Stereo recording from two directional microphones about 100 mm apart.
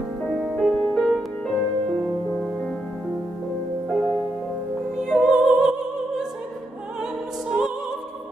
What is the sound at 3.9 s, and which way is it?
Music, centre (ahead or behind).